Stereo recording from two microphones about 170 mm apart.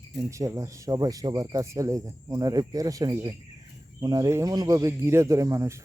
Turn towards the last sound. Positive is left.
turn(degrees=-15)  # may be behind; listen again after turning